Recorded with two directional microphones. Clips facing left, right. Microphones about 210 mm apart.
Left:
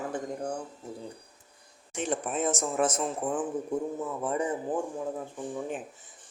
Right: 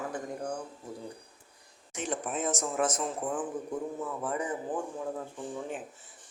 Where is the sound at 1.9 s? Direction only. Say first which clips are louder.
Left 3 dB; 30° left (ahead or behind).